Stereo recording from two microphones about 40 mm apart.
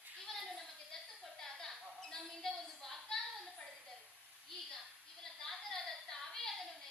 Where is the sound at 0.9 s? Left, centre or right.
Centre.